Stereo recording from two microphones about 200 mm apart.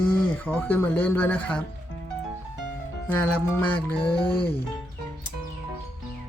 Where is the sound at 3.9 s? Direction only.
25° left (ahead or behind).